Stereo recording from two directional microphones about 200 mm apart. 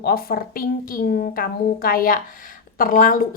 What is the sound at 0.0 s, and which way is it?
A woman's voice, 50° left (ahead or behind).